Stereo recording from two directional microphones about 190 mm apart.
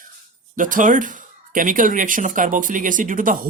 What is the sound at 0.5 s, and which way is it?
Speech, 45° right (ahead or behind).